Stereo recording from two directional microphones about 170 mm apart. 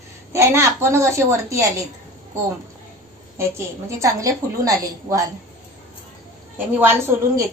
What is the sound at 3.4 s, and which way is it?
A woman's voice, 15° right (ahead or behind).